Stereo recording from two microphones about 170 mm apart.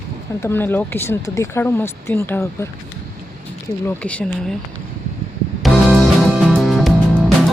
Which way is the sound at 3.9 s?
10° left (ahead or behind).